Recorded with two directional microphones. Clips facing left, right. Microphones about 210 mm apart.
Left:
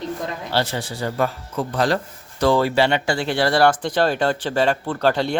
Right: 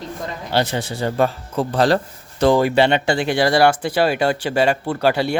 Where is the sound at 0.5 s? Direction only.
20° right (ahead or behind).